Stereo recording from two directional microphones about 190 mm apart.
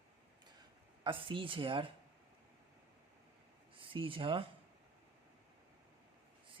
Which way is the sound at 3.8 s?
30° right (ahead or behind).